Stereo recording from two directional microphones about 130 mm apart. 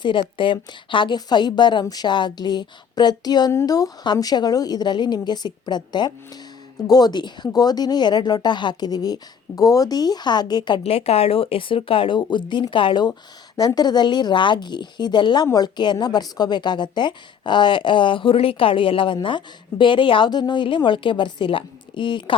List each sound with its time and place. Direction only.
0.0 s speech: 40° left (ahead or behind)
10.8 s speech: 50° left (ahead or behind)